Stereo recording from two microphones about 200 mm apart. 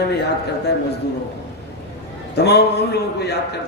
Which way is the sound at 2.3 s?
55° left (ahead or behind).